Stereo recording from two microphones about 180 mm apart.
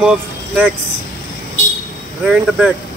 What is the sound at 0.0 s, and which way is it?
Speech, 5° right (ahead or behind).